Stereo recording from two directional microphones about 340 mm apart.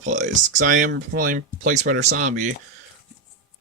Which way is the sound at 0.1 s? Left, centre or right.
Right.